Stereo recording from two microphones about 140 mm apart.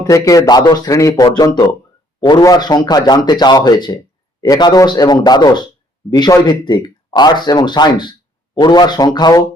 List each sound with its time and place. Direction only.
0.1 s speech: 25° left (ahead or behind)